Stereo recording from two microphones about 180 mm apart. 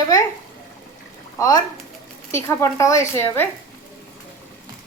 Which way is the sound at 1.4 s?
20° left (ahead or behind).